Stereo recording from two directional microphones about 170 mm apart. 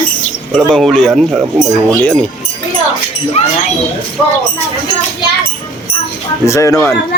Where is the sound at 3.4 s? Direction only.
35° left (ahead or behind).